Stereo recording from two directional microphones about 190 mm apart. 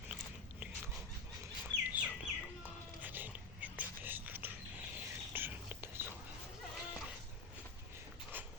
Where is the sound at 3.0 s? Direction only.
10° right (ahead or behind).